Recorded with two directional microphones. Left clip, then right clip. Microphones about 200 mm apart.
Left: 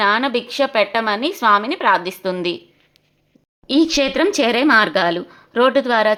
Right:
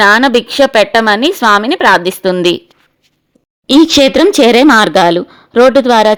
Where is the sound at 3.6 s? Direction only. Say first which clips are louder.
Right 10 dB; 45° right (ahead or behind).